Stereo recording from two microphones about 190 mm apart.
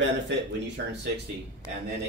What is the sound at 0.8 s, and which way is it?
Speech, 60° right (ahead or behind).